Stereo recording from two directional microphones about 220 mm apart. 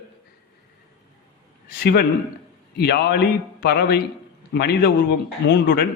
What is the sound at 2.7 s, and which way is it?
A man's voice, 45° left (ahead or behind).